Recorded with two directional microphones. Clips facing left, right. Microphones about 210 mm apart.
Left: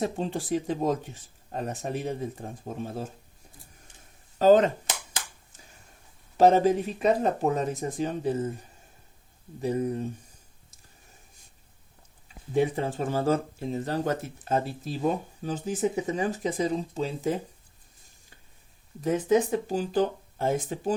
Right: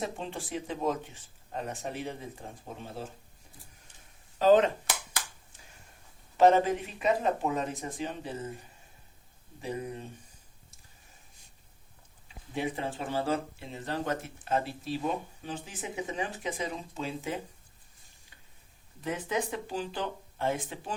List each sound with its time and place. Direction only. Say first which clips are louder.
0.0 s speech: left 7 dB; 40° left (ahead or behind)
4.4 s speech: left 3 dB; 45° left (ahead or behind)
6.3 s speech: left 3 dB; 40° left (ahead or behind)
9.6 s speech: left 9 dB; 40° left (ahead or behind)
12.5 s speech: left 8 dB; 40° left (ahead or behind)
19.0 s speech: left 9 dB; 45° left (ahead or behind)